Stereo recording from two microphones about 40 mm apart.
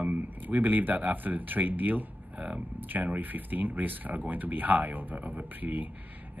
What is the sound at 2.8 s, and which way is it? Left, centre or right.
Speech, right.